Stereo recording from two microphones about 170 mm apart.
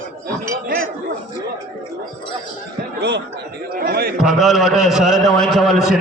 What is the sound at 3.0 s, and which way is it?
Speech, 80° right.